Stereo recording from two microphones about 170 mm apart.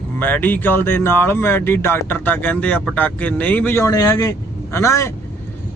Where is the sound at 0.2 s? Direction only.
10° left (ahead or behind).